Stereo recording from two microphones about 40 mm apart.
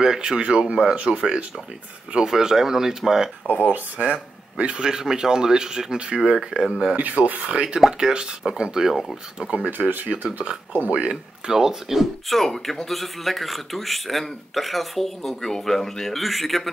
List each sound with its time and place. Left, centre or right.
0.0 s speech: centre
0.4 s speech: right
2.2 s speech: centre
3.6 s speech: right
4.1 s speech: right
4.8 s speech: centre
7.0 s speech: right
8.0 s speech: centre
8.8 s speech: centre
9.7 s speech: right
10.7 s speech: right
11.5 s speech: centre
12.0 s speech: centre